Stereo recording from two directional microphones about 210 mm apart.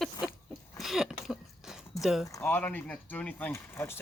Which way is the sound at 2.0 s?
Centre (ahead or behind).